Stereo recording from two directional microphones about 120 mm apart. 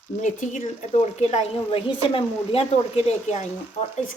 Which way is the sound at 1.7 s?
45° left (ahead or behind).